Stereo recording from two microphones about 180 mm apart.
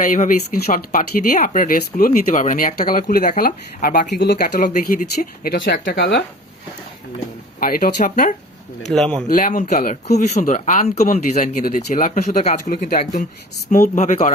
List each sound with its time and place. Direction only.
0.0 s speech: 45° left (ahead or behind); by 6.2 s 70° left (ahead or behind)
7.6 s speech: 50° left (ahead or behind)
8.9 s speech: 5° left (ahead or behind)
9.3 s speech: 45° left (ahead or behind)